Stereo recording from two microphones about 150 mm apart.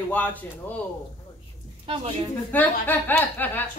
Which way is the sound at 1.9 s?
40° right (ahead or behind).